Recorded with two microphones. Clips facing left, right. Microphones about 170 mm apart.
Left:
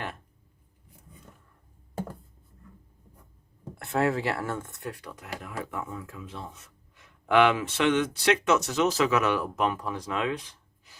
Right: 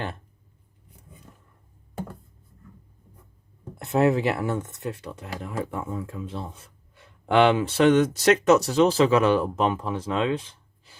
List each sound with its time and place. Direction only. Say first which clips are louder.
3.8 s speech: right 5 dB; 20° right (ahead or behind)